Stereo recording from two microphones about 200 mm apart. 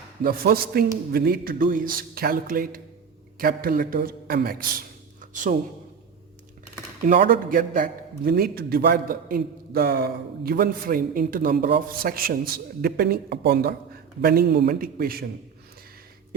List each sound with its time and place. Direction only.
0.2 s a man's voice: 45° right (ahead or behind)
7.1 s a man's voice: 45° right (ahead or behind)